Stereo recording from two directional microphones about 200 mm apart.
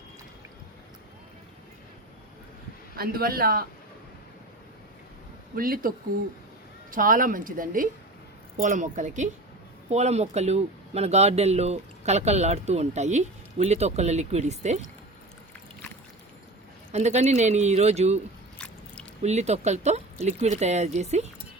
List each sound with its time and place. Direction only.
2.9 s a woman's voice: 50° right (ahead or behind)
5.5 s a woman's voice: 45° right (ahead or behind)
6.9 s a woman's voice: 45° right (ahead or behind)
16.9 s speech: 35° right (ahead or behind)
19.2 s speech: 35° right (ahead or behind)